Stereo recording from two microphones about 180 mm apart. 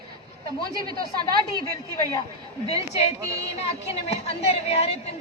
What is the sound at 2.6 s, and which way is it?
A man's voice, 35° left (ahead or behind).